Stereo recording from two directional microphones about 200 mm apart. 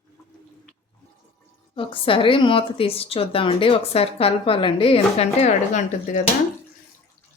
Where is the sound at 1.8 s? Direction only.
25° left (ahead or behind).